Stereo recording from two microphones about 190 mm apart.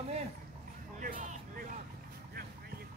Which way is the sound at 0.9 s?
45° right (ahead or behind).